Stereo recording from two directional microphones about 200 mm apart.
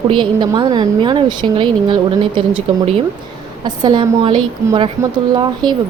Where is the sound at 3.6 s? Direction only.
20° right (ahead or behind).